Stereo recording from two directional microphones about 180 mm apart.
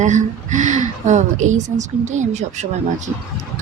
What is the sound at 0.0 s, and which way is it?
Speech, 45° right (ahead or behind).